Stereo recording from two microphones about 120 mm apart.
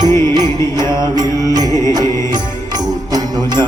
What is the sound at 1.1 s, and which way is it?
Music, 30° right (ahead or behind).